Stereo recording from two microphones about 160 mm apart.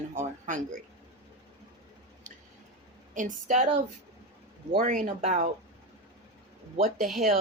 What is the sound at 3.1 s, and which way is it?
Speech, 55° right (ahead or behind).